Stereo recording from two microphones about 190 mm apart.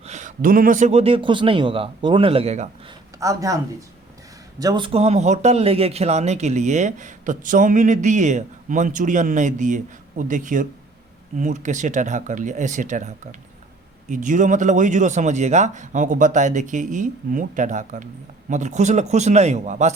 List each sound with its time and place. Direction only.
0.0 s speech: 40° right (ahead or behind)
3.2 s speech: 15° right (ahead or behind); by 19.9 s 40° right (ahead or behind)